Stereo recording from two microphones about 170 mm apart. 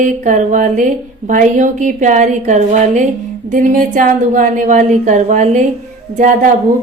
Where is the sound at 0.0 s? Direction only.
50° right (ahead or behind).